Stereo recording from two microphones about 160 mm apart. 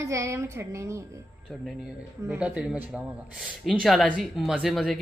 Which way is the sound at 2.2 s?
5° right (ahead or behind).